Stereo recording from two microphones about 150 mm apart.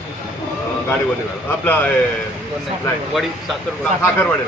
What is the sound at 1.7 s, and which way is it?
Speech, 10° left (ahead or behind).